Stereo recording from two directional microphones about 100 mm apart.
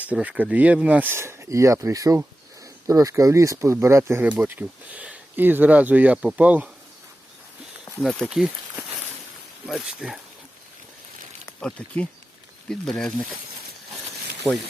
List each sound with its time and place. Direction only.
0.0 s speech: 15° right (ahead or behind)
4.2 s speech: 15° right (ahead or behind)
8.0 s speech: 10° left (ahead or behind)
8.3 s speech: 5° right (ahead or behind)
11.8 s speech: 10° left (ahead or behind)